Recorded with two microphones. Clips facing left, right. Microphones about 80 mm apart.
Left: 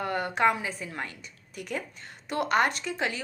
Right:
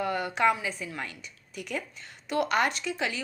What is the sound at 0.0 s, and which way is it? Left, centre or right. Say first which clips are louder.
A woman's voice: even; left.